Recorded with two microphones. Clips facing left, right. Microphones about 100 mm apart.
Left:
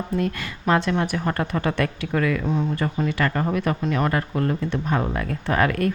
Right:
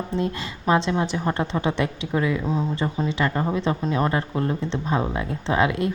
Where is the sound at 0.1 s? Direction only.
25° right (ahead or behind).